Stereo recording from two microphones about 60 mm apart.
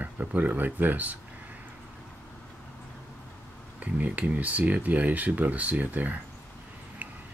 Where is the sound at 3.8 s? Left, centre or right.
Right.